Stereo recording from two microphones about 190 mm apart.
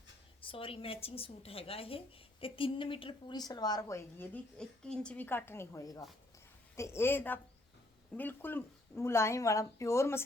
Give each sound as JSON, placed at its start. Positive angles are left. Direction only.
{"t": 0.4, "sound": "a woman's voice", "side_deg": 30}
{"t": 4.5, "sound": "speech", "side_deg": 5}